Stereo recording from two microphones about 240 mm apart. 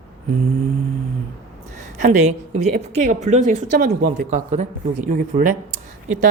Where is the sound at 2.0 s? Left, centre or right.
Right.